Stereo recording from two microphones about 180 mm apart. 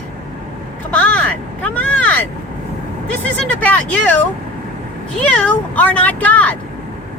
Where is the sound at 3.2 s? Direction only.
5° left (ahead or behind).